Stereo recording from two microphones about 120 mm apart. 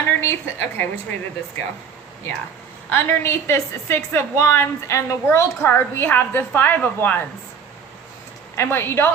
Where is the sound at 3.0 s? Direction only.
20° left (ahead or behind).